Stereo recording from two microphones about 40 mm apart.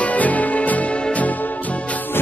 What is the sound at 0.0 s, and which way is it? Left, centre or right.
Music, left.